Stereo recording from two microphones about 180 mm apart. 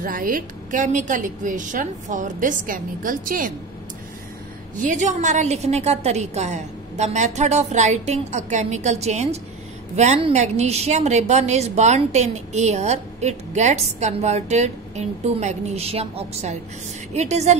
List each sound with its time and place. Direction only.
0.0 s a woman's voice: 50° right (ahead or behind)
4.7 s a woman's voice: 45° right (ahead or behind)